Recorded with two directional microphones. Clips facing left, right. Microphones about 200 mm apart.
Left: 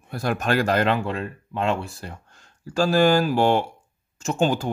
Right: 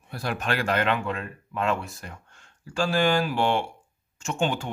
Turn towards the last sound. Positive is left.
turn(degrees=40)  # may be behind; listen again after turning